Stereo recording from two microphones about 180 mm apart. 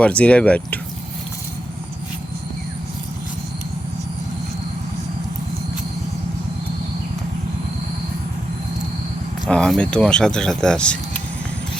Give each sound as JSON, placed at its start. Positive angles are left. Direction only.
{"t": 0.0, "sound": "speech", "side_deg": 5}
{"t": 9.5, "sound": "speech", "side_deg": 5}